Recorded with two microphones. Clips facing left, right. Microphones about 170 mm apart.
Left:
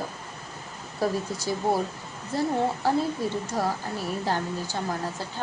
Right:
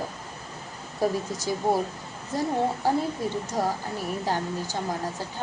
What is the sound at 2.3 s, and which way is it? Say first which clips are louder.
A woman's voice: even; 15° right (ahead or behind).